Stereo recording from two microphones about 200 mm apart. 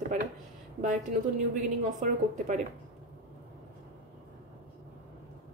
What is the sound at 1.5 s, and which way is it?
A woman's voice, 40° right (ahead or behind).